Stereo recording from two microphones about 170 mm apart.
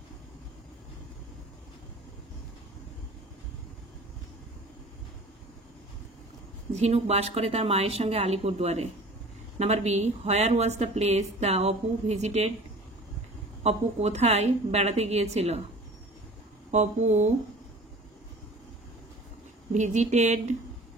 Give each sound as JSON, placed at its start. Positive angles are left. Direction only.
{"t": 6.7, "sound": "speech", "side_deg": -40}
{"t": 13.6, "sound": "speech", "side_deg": -40}
{"t": 16.7, "sound": "speech", "side_deg": -45}
{"t": 19.7, "sound": "speech", "side_deg": -45}